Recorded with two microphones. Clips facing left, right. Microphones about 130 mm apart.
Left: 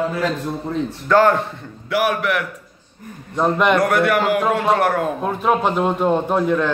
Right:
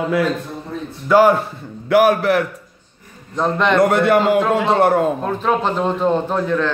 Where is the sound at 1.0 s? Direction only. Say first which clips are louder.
Right 2 dB; 10° right (ahead or behind).